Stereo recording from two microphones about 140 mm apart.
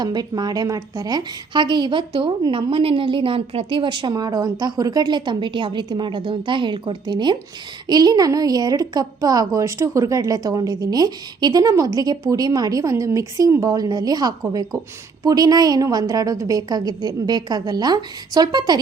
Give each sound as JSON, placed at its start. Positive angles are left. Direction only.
{"t": 0.0, "sound": "a woman's voice", "side_deg": -30}